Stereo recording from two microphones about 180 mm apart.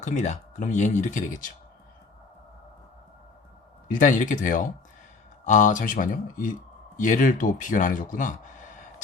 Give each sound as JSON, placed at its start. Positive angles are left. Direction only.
{"t": 0.0, "sound": "speech", "side_deg": 40}
{"t": 3.8, "sound": "speech", "side_deg": 45}